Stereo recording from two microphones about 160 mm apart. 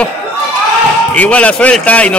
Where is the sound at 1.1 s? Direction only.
10° left (ahead or behind).